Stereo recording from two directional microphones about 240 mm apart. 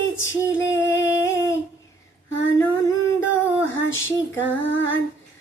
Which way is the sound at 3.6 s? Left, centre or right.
Left.